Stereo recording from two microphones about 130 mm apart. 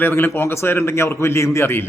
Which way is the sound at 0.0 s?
15° left (ahead or behind).